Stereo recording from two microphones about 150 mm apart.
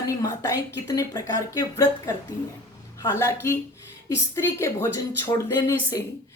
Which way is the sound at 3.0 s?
20° left (ahead or behind).